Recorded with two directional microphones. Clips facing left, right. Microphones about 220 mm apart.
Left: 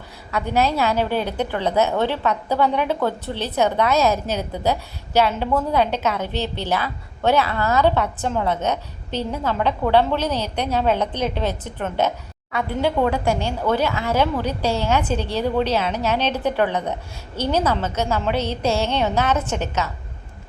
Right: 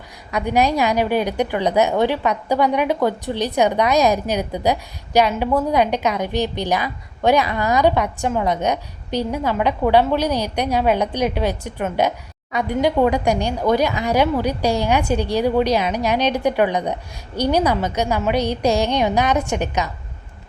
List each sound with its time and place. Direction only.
0.3 s a woman's voice: 15° right (ahead or behind)